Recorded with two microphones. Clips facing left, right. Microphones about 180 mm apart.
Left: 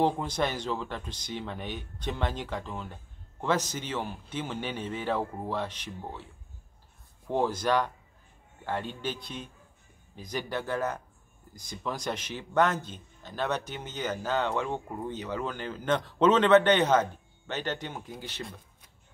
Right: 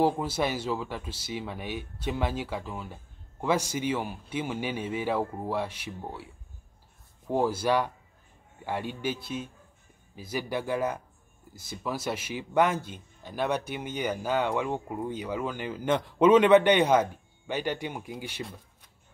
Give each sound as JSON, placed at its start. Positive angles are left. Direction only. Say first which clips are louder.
{"t": 0.0, "sound": "speech", "louder": "right 1 dB", "side_deg": -5}
{"t": 7.2, "sound": "speech", "louder": "right 1 dB", "side_deg": -10}